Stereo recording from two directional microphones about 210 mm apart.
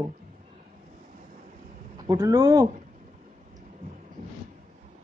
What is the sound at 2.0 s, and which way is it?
Speech, 15° right (ahead or behind).